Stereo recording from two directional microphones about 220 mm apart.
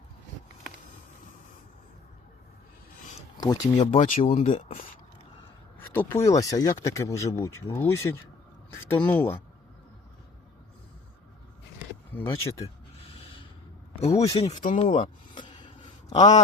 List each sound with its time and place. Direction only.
3.3 s speech: 20° left (ahead or behind)
4.0 s speech: 30° left (ahead or behind)
5.9 s speech: 10° left (ahead or behind)
12.1 s speech: 10° left (ahead or behind)
14.1 s speech: 15° left (ahead or behind)
14.6 s a sound: 30° left (ahead or behind)